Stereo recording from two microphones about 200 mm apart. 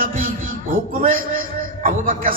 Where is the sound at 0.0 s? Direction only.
45° right (ahead or behind).